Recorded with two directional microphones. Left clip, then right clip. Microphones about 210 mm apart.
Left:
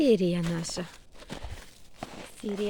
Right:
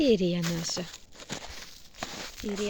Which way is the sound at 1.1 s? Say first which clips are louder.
Right 3 dB; 20° right (ahead or behind).